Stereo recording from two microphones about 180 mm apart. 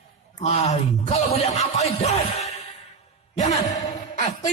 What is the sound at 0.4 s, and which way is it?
Speech, 35° left (ahead or behind).